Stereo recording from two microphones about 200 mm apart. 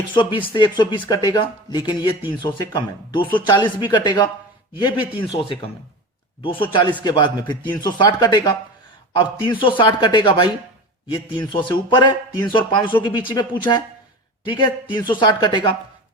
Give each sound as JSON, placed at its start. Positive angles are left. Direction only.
{"t": 0.1, "sound": "speech", "side_deg": 25}